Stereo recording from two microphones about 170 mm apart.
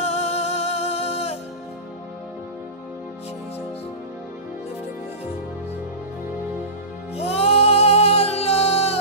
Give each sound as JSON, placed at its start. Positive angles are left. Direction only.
{"t": 0.0, "sound": "music", "side_deg": 40}
{"t": 7.2, "sound": "music", "side_deg": 35}